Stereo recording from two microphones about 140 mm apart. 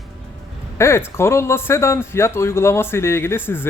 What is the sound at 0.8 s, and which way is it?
Speech, 20° left (ahead or behind).